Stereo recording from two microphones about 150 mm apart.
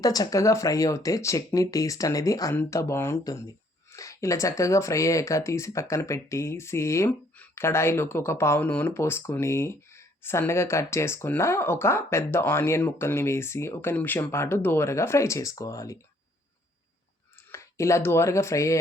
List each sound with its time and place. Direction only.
0.0 s speech: 25° left (ahead or behind)
17.5 s speech: 20° left (ahead or behind)